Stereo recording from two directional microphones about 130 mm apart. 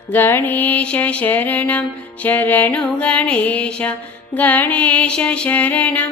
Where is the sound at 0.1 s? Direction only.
15° left (ahead or behind).